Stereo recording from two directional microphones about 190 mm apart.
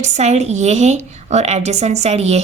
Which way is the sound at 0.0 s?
35° right (ahead or behind).